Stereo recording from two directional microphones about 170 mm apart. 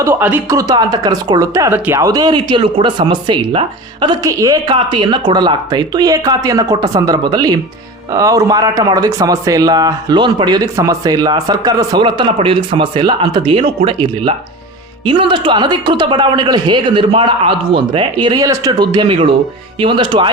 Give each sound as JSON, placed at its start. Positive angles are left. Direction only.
{"t": 0.0, "sound": "speech", "side_deg": -10}